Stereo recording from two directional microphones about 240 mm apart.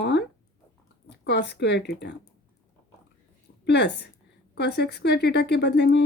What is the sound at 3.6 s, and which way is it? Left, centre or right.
Speech, left.